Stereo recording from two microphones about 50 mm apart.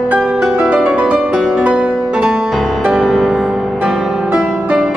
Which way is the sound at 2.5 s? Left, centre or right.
Centre.